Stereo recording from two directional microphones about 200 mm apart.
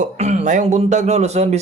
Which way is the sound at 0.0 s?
35° right (ahead or behind).